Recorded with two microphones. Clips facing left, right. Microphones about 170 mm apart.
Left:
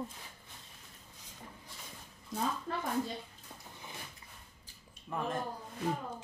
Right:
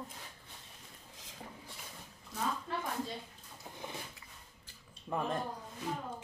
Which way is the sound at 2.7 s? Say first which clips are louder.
Left 1 dB; 45° left (ahead or behind).